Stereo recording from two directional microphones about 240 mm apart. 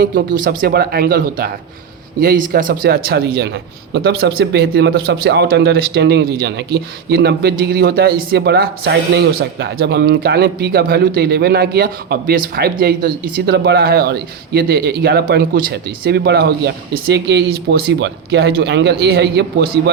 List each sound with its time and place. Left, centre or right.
0.0 s a man's voice: right